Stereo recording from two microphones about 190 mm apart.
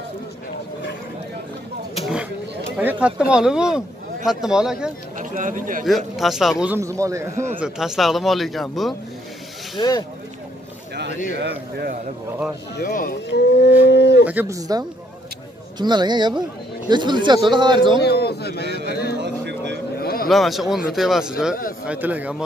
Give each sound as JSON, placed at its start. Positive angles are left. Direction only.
{"t": 2.8, "sound": "speech", "side_deg": -10}
{"t": 5.2, "sound": "speech", "side_deg": -45}
{"t": 5.9, "sound": "speech", "side_deg": 0}
{"t": 6.6, "sound": "speech", "side_deg": -10}
{"t": 7.6, "sound": "speech", "side_deg": 0}
{"t": 9.8, "sound": "speech", "side_deg": 20}
{"t": 11.3, "sound": "a man's voice", "side_deg": -55}
{"t": 12.7, "sound": "speech", "side_deg": 50}
{"t": 13.3, "sound": "a sound", "side_deg": 65}
{"t": 14.2, "sound": "speech", "side_deg": -10}
{"t": 18.0, "sound": "a sound", "side_deg": 60}
{"t": 19.2, "sound": "vehicle", "side_deg": -65}
{"t": 20.0, "sound": "a sound", "side_deg": 50}
{"t": 20.2, "sound": "speech", "side_deg": 0}